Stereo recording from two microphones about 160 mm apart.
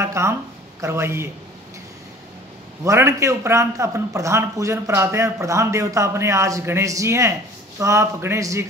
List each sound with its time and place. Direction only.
0.0 s a woman's voice: 15° right (ahead or behind)
2.8 s a man's voice: 20° right (ahead or behind)